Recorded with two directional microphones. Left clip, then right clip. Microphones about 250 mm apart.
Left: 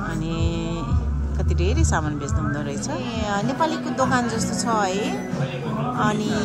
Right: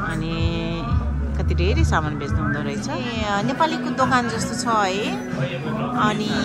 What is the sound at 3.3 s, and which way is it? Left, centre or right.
Speech, centre.